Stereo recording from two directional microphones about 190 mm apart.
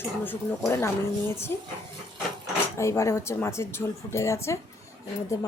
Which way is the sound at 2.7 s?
15° left (ahead or behind).